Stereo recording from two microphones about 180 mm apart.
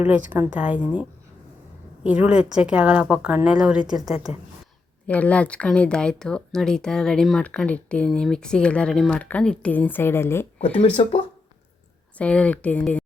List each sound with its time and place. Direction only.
0.0 s a woman's voice: 10° right (ahead or behind)
2.0 s speech: 10° right (ahead or behind)
4.3 s speech: 35° left (ahead or behind)
5.0 s speech: 5° left (ahead or behind)
10.8 s speech: 35° left (ahead or behind)
12.1 s speech: 5° left (ahead or behind)